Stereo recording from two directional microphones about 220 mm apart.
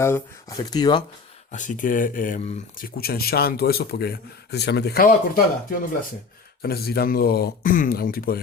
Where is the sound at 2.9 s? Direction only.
45° left (ahead or behind).